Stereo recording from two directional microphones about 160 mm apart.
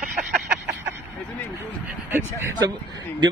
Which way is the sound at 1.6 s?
10° right (ahead or behind).